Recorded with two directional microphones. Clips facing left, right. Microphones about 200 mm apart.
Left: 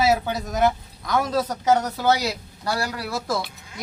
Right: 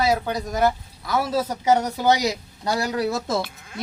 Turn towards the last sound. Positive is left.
turn(degrees=-20)  # may be behind; listen again after turning